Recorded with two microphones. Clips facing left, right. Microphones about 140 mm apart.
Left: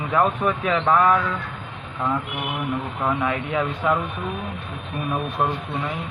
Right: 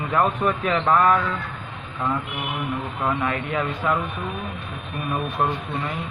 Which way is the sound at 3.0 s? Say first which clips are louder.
Left 1 dB; 5° left (ahead or behind).